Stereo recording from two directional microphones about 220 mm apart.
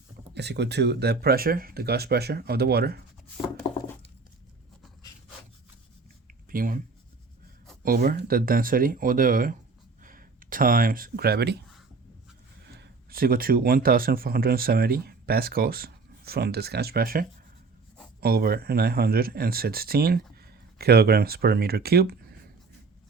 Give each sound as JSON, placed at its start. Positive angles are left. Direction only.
{"t": 0.3, "sound": "speech", "side_deg": -50}
{"t": 6.5, "sound": "speech", "side_deg": -40}
{"t": 7.9, "sound": "speech", "side_deg": -45}
{"t": 12.6, "sound": "speech", "side_deg": -50}